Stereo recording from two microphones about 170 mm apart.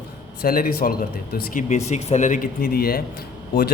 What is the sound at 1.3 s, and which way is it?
Speech, 45° left (ahead or behind).